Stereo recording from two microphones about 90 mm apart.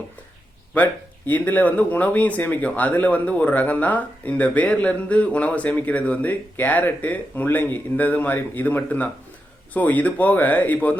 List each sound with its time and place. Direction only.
1.3 s speech: 20° left (ahead or behind)